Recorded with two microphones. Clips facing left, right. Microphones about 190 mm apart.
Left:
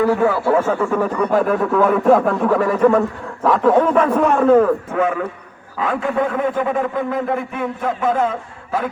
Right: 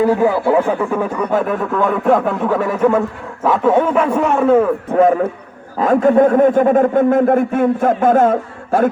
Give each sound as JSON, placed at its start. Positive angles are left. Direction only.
{"t": 0.0, "sound": "a man's voice", "side_deg": -20}
{"t": 1.3, "sound": "a man's voice", "side_deg": 0}
{"t": 4.9, "sound": "a man's voice", "side_deg": -35}